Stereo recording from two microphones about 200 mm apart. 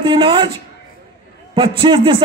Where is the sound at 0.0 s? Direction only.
25° right (ahead or behind).